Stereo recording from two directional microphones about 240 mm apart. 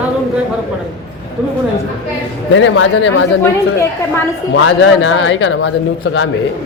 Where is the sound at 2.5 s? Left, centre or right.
Left.